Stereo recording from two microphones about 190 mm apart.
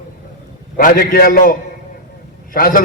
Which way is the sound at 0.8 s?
50° left (ahead or behind).